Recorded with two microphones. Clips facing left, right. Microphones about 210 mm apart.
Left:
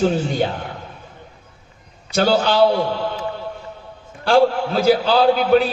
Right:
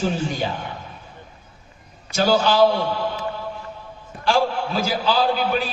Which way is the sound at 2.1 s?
60° left (ahead or behind).